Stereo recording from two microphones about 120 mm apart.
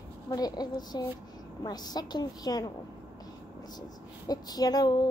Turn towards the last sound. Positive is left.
turn(degrees=35)  # may be behind; listen again after turning